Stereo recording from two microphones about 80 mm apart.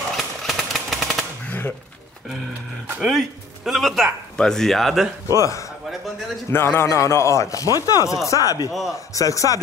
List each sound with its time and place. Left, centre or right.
0.1 s a sound: centre
3.0 s speech: centre
5.4 s speech: left
6.5 s speech: left